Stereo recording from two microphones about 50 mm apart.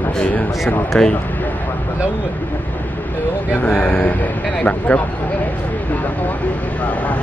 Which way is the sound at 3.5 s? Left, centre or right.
Left.